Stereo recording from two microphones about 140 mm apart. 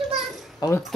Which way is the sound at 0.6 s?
30° left (ahead or behind).